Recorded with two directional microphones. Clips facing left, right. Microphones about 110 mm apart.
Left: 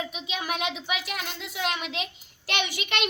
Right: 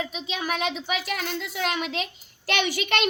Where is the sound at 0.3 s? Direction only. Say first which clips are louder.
Right 2 dB; 35° right (ahead or behind).